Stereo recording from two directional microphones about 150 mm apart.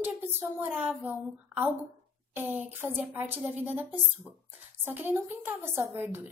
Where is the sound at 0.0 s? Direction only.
15° right (ahead or behind).